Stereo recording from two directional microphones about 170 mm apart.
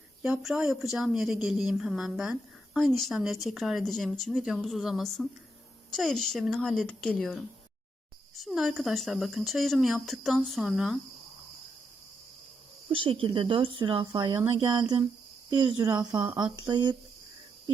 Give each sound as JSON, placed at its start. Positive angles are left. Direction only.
{"t": 0.2, "sound": "speech", "side_deg": -5}
{"t": 8.4, "sound": "speech", "side_deg": 0}
{"t": 12.9, "sound": "speech", "side_deg": -30}